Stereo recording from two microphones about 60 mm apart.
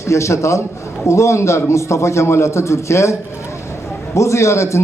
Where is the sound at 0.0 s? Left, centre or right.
Left.